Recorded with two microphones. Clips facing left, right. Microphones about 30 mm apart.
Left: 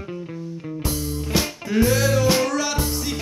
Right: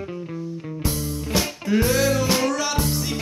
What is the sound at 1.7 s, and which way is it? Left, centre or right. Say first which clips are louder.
Music: left 1 dB; centre.